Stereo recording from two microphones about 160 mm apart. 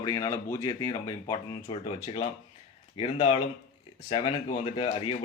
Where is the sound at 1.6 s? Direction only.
35° left (ahead or behind).